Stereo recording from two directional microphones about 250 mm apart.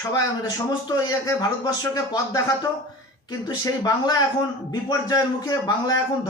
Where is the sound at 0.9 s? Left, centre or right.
Centre.